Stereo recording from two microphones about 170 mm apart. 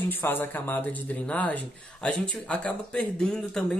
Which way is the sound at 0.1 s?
10° left (ahead or behind).